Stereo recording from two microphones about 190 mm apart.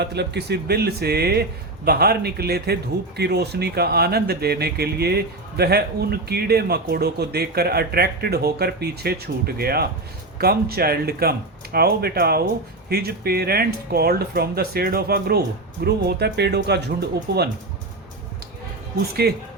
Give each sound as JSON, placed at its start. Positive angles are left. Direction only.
{"t": 0.0, "sound": "speech", "side_deg": -60}
{"t": 19.2, "sound": "speech", "side_deg": -55}